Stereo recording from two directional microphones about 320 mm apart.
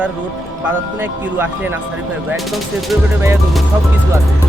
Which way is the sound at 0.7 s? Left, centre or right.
Centre.